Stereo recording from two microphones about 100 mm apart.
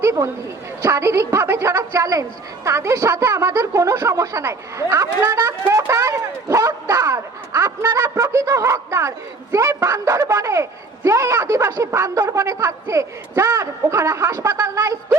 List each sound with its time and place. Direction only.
0.0 s a woman's voice: 30° right (ahead or behind)